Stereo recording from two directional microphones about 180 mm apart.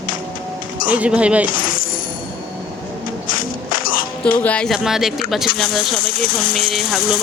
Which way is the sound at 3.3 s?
50° left (ahead or behind).